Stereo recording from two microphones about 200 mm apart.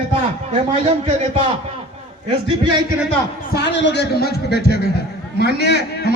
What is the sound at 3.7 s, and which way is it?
A man's voice, 65° left (ahead or behind).